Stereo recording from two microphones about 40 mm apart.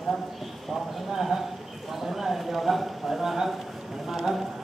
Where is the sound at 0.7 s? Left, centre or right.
Centre.